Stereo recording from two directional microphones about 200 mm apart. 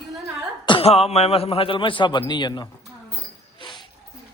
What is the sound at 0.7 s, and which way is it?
A man's voice, 30° left (ahead or behind).